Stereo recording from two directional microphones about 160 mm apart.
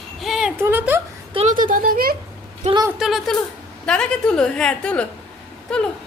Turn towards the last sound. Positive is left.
turn(degrees=5)  # may be behind; listen again after turning